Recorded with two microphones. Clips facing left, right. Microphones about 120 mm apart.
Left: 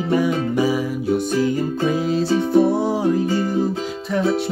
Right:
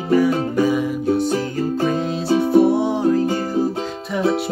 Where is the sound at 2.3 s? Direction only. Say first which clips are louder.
Right 3 dB; 5° right (ahead or behind).